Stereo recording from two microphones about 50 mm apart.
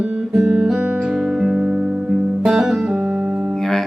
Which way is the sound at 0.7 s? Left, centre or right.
Right.